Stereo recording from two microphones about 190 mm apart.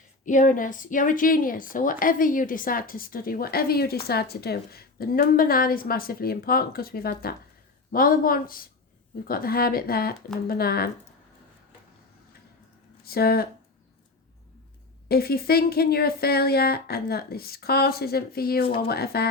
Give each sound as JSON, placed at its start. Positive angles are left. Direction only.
{"t": 0.3, "sound": "a woman's voice", "side_deg": 45}
{"t": 13.1, "sound": "speech", "side_deg": 55}
{"t": 15.0, "sound": "a woman's voice", "side_deg": 55}